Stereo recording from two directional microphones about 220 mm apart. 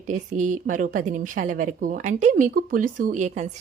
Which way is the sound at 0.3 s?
35° right (ahead or behind).